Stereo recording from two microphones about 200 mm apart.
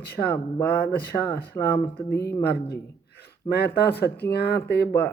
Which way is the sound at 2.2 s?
15° left (ahead or behind).